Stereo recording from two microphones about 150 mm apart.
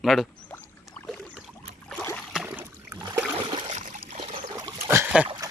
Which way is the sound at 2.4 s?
15° right (ahead or behind).